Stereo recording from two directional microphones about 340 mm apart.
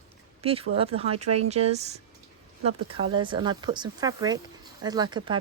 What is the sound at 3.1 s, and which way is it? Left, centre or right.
Speech, centre.